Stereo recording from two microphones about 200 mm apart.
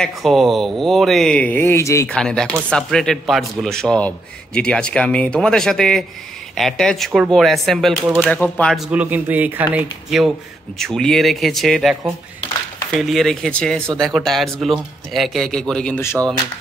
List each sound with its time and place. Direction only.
0.0 s speech: centre (ahead or behind)